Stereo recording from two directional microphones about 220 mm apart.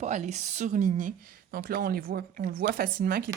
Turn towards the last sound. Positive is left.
turn(degrees=-40)  # may be behind; listen again after turning